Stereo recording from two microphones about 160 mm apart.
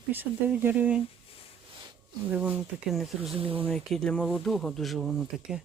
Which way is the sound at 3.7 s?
5° left (ahead or behind).